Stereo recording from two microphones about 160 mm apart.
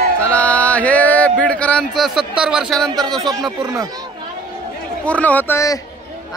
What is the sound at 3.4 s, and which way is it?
Speech, 20° right (ahead or behind).